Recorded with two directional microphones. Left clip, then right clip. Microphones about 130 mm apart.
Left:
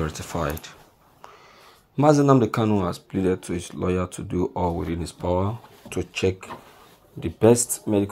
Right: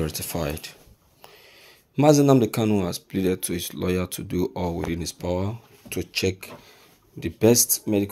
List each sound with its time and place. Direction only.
0.0 s speech: 35° right (ahead or behind)
2.0 s speech: 40° right (ahead or behind)
3.5 s speech: 20° right (ahead or behind)
3.8 s speech: 35° right (ahead or behind); by 5.6 s 20° right (ahead or behind)
7.2 s speech: 25° right (ahead or behind)